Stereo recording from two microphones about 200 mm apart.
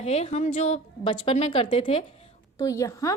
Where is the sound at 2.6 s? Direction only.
15° left (ahead or behind).